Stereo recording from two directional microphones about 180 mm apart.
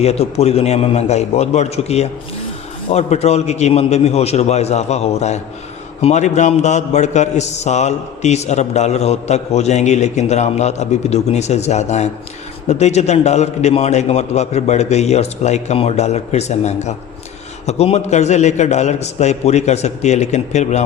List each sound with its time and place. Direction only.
0.0 s a man's voice: 35° left (ahead or behind)